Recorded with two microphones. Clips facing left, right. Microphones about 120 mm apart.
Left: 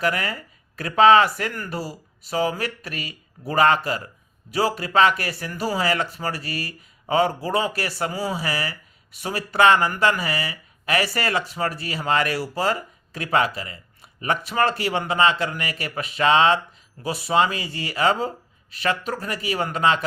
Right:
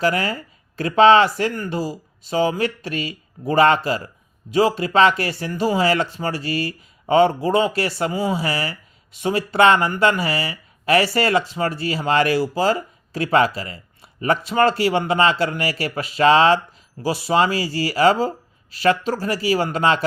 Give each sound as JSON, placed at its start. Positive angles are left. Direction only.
{"t": 0.0, "sound": "speech", "side_deg": -30}